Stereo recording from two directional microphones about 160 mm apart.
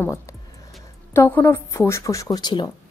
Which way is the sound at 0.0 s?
20° left (ahead or behind).